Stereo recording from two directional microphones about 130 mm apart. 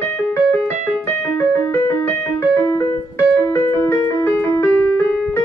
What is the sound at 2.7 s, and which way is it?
Music, 20° left (ahead or behind).